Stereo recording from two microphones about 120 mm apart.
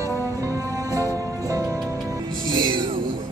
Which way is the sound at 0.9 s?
30° right (ahead or behind).